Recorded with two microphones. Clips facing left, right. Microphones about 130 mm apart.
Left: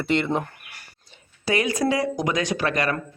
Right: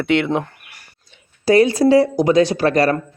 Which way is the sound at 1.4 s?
35° right (ahead or behind).